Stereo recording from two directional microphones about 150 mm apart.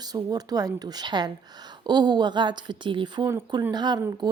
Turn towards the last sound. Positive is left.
turn(degrees=-30)  # may be behind; listen again after turning